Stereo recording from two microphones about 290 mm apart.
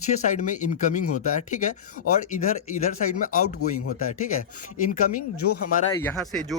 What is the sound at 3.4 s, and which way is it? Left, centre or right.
Speech, left.